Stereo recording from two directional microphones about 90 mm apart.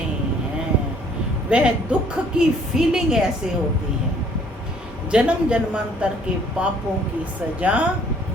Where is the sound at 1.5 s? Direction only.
10° right (ahead or behind).